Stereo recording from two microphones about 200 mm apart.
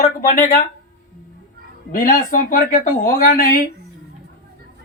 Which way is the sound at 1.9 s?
45° left (ahead or behind).